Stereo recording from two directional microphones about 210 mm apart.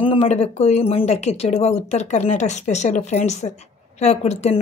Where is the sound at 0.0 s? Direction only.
25° left (ahead or behind).